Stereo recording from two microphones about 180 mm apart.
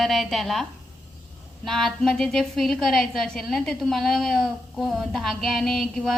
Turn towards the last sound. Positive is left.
turn(degrees=0)  # may be behind; listen again after turning